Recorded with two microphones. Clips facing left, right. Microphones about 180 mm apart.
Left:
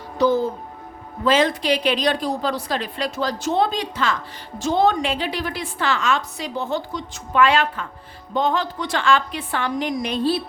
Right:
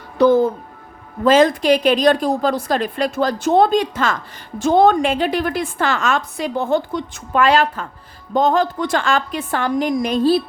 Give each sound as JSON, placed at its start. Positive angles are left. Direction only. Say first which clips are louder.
{"t": 0.2, "sound": "music", "louder": "right 6 dB", "side_deg": -55}
{"t": 1.2, "sound": "a woman's voice", "louder": "right 6 dB", "side_deg": -45}